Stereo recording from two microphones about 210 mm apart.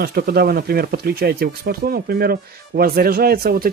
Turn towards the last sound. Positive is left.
turn(degrees=-45)  # may be behind; listen again after turning